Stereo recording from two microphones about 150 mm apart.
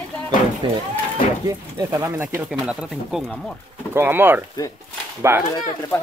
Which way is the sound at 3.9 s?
15° right (ahead or behind).